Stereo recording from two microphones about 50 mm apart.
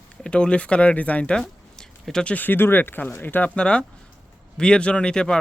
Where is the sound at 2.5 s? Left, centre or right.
Left.